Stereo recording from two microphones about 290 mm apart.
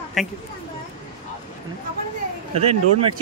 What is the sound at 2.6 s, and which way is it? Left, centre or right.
Speech, right.